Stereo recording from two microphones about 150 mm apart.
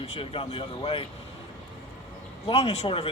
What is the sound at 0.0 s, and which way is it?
Speech, 40° left (ahead or behind).